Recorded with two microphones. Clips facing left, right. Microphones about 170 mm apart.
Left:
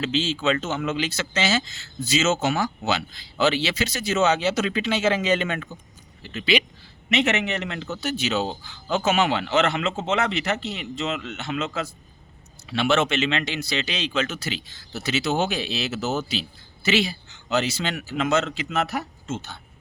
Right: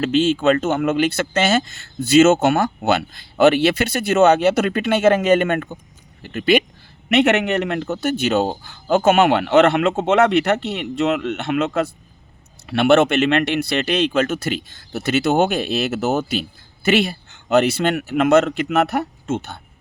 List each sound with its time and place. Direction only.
0.0 s a man's voice: 55° right (ahead or behind)